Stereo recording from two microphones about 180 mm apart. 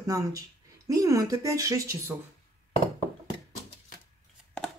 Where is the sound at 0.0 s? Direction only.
20° right (ahead or behind).